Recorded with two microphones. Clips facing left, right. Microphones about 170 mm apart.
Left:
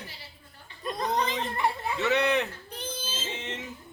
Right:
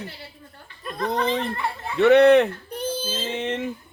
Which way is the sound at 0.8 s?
15° left (ahead or behind).